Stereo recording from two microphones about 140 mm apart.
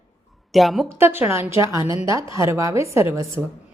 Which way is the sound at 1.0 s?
15° right (ahead or behind).